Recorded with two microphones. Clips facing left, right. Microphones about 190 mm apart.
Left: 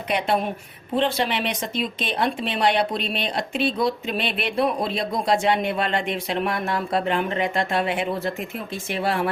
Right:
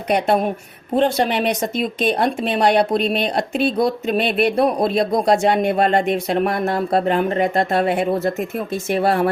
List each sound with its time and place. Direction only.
0.1 s speech: 45° right (ahead or behind)